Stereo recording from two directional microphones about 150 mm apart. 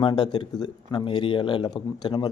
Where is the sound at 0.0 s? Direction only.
30° left (ahead or behind).